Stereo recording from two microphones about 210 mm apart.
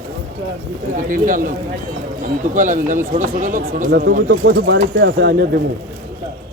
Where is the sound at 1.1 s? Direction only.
40° right (ahead or behind).